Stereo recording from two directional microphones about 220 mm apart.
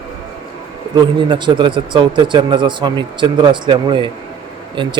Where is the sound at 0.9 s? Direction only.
20° right (ahead or behind).